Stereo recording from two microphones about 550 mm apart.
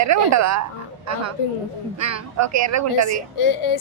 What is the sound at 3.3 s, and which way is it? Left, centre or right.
Speech, left.